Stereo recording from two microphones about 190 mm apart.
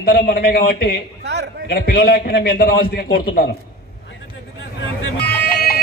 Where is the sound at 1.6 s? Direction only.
60° left (ahead or behind).